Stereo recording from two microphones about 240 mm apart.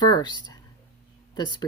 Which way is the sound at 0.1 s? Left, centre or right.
Centre.